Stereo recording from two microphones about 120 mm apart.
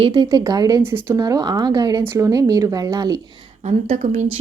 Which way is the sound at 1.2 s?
30° right (ahead or behind).